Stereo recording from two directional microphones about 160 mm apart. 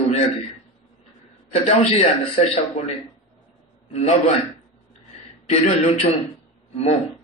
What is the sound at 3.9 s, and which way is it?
Speech, 40° left (ahead or behind).